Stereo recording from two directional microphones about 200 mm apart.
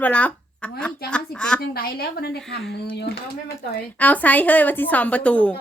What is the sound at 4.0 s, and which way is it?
A woman's voice, 10° left (ahead or behind).